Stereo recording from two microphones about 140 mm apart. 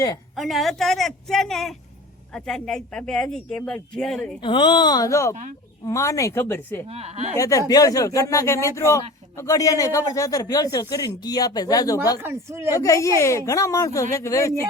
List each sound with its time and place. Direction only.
0.3 s speech: centre (ahead or behind)
4.4 s speech: 35° left (ahead or behind); by 6.8 s 15° left (ahead or behind)
6.8 s speech: 45° right (ahead or behind)
7.3 s speech: 25° left (ahead or behind)
12.2 s speech: 20° right (ahead or behind)
12.7 s speech: 20° left (ahead or behind)